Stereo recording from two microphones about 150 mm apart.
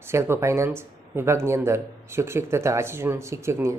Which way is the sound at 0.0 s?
15° right (ahead or behind).